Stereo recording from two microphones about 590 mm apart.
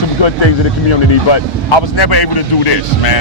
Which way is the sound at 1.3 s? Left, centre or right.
Left.